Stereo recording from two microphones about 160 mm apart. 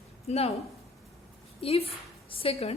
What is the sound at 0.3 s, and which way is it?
Speech, 40° left (ahead or behind).